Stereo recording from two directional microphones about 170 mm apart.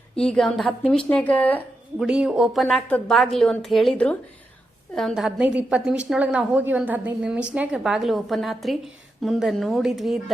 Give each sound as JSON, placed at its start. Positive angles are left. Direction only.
{"t": 0.2, "sound": "a woman's voice", "side_deg": 5}
{"t": 2.0, "sound": "a woman's voice", "side_deg": -5}